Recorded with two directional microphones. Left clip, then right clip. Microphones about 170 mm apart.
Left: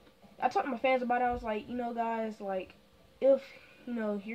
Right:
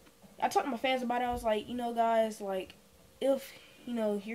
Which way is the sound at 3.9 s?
15° right (ahead or behind).